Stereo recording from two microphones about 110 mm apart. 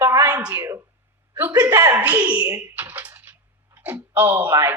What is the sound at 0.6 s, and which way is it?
A woman's voice, 30° right (ahead or behind).